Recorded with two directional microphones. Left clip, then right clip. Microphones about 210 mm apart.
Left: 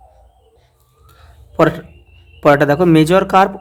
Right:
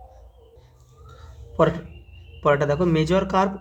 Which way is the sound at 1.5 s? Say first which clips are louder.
Left 7 dB; 40° left (ahead or behind).